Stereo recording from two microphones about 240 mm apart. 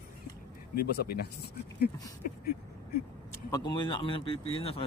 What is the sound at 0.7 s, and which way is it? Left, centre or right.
Speech, left.